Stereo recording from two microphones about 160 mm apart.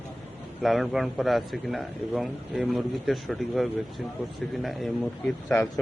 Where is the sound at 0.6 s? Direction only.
Centre (ahead or behind).